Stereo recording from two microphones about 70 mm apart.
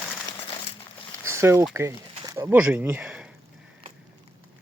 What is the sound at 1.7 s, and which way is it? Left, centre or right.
Speech, right.